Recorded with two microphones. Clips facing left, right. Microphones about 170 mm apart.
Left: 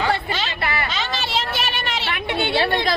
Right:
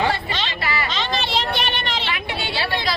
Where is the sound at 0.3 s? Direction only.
5° left (ahead or behind).